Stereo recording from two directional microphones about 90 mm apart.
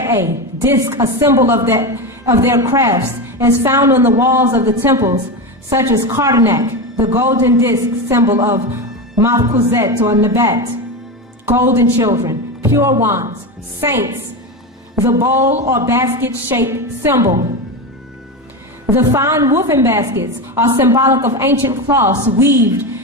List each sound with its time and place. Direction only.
0.0 s a woman's voice: 30° right (ahead or behind)
7.1 s a woman's voice: 25° right (ahead or behind)
9.6 s a woman's voice: 30° right (ahead or behind)
11.9 s a woman's voice: 40° right (ahead or behind)
15.2 s a woman's voice: 35° right (ahead or behind)
18.9 s a woman's voice: 30° right (ahead or behind)